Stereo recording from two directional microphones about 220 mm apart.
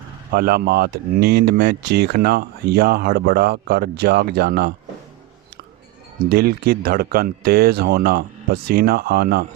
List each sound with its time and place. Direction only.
0.3 s speech: 45° right (ahead or behind)
6.2 s speech: 45° right (ahead or behind)